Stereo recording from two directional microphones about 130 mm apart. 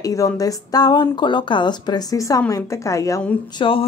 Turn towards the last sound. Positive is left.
turn(degrees=45)  # may be behind; listen again after turning